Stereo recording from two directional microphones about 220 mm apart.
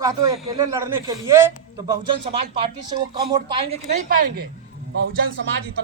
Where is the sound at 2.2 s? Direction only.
25° right (ahead or behind).